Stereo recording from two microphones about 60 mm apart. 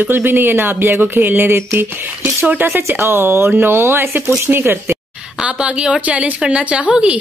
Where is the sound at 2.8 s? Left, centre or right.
Right.